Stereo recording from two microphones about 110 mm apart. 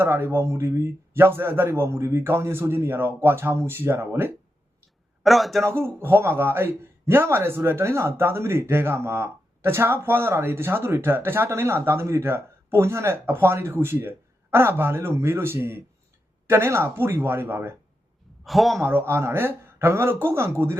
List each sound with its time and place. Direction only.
0.0 s speech: 20° right (ahead or behind)
5.2 s a man's voice: centre (ahead or behind)
5.6 s speech: 20° right (ahead or behind)
18.4 s a man's voice: centre (ahead or behind)
18.8 s speech: 20° right (ahead or behind)